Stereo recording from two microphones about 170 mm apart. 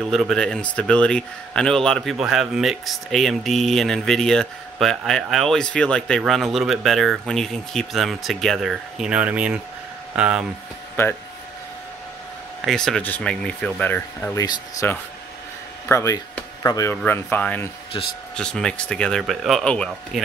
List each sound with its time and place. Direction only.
0.1 s speech: centre (ahead or behind)
12.6 s speech: 5° left (ahead or behind)
14.4 s speech: 20° left (ahead or behind)
15.9 s speech: 20° left (ahead or behind)